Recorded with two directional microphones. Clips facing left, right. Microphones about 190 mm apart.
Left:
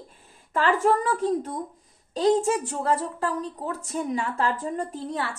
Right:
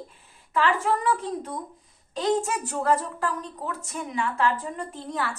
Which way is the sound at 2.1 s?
30° left (ahead or behind).